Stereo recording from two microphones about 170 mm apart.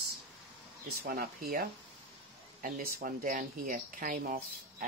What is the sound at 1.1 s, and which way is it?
Speech, 65° right (ahead or behind).